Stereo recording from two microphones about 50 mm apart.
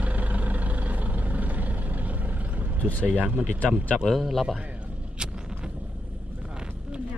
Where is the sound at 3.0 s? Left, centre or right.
Right.